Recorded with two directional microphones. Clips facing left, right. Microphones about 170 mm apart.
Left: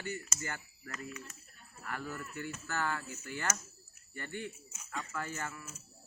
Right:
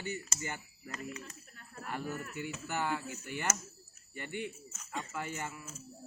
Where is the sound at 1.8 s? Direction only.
20° right (ahead or behind).